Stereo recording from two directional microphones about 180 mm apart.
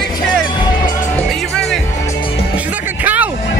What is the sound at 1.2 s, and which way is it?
Speech, centre (ahead or behind).